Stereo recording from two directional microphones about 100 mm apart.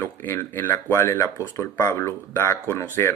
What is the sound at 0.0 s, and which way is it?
Speech, 20° left (ahead or behind).